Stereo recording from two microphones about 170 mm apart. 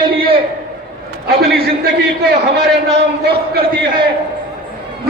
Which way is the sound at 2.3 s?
90° right.